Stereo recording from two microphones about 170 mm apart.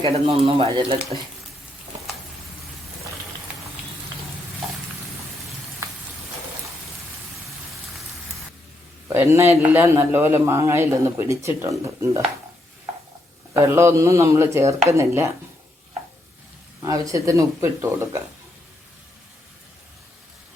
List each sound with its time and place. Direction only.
0.0 s speech: 35° right (ahead or behind)
9.0 s a man's voice: 15° right (ahead or behind)
13.5 s a man's voice: 15° right (ahead or behind)
16.8 s a man's voice: 20° right (ahead or behind)